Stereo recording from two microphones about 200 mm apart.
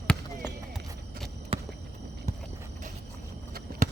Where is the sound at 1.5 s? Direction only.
25° right (ahead or behind).